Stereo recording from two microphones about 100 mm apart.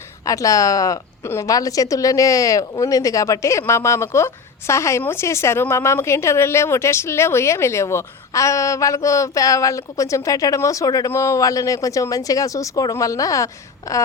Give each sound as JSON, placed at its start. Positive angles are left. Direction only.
{"t": 0.3, "sound": "a woman's voice", "side_deg": 35}